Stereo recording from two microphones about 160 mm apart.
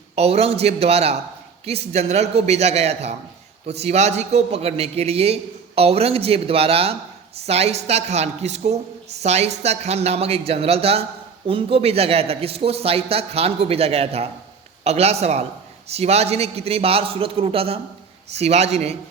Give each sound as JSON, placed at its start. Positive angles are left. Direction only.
{"t": 0.2, "sound": "a woman's voice", "side_deg": -40}